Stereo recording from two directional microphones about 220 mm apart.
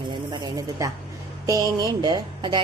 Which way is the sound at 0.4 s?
15° right (ahead or behind).